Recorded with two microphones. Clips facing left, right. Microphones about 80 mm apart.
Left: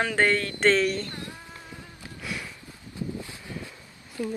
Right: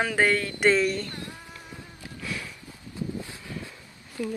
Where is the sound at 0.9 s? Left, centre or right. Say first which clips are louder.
Even; left.